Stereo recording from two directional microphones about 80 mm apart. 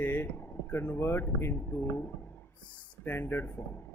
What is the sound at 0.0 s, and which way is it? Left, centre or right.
Speech, left.